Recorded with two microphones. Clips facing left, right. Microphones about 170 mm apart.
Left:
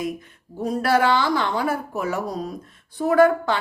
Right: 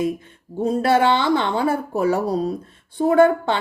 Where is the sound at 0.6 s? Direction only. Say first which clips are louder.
Right 3 dB; 25° right (ahead or behind).